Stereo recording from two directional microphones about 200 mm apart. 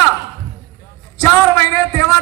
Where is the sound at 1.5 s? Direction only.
20° left (ahead or behind).